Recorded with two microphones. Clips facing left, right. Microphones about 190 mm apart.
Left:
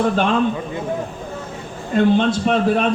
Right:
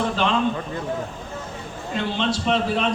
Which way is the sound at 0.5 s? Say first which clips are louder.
Left 3 dB; 15° left (ahead or behind).